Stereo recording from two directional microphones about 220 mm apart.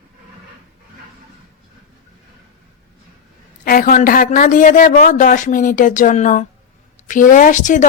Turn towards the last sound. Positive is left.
turn(degrees=35)  # may be behind; listen again after turning